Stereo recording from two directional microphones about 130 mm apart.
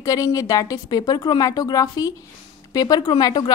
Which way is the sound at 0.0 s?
25° left (ahead or behind).